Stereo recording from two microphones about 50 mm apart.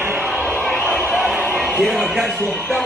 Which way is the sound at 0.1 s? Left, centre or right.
Right.